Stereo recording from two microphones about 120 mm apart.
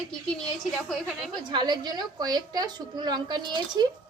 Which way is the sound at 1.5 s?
40° right (ahead or behind).